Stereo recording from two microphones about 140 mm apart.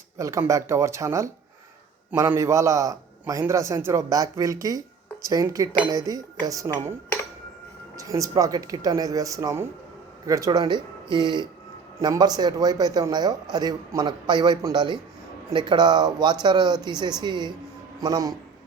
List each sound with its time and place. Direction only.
0.2 s a man's voice: 20° right (ahead or behind)
7.9 s a man's voice: 25° right (ahead or behind)